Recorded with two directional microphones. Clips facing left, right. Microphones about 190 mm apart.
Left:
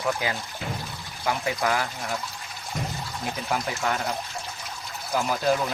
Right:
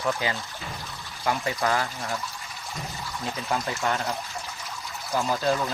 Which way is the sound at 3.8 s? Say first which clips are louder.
Even; centre (ahead or behind).